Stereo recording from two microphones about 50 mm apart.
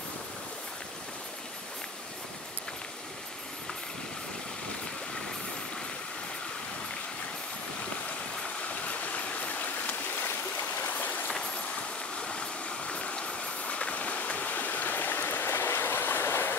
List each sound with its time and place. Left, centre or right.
8.6 s stream: left
10.9 s a sound: left
12.2 s vehicle: left